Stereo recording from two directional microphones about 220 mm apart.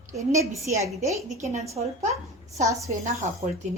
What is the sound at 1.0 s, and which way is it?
A woman's voice, 30° right (ahead or behind).